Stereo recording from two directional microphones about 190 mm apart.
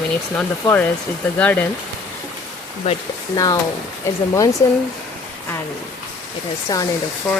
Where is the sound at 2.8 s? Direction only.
35° left (ahead or behind).